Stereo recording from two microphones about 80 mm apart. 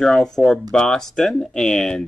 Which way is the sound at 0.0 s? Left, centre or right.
Centre.